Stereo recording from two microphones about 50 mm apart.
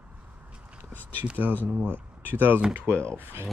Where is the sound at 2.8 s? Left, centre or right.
Left.